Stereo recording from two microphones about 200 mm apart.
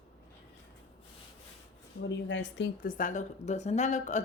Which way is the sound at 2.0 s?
65° left (ahead or behind).